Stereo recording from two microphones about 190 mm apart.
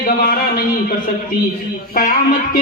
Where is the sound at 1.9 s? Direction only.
45° left (ahead or behind).